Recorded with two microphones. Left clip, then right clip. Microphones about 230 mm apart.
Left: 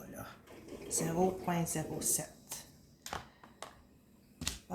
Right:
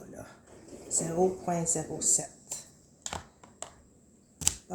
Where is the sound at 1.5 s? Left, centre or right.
Centre.